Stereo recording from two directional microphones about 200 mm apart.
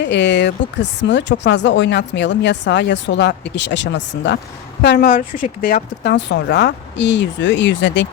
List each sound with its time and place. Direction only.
0.0 s speech: 60° left (ahead or behind)